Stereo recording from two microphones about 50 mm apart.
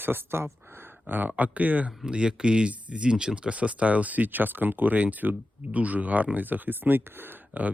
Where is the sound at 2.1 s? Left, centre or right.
Centre.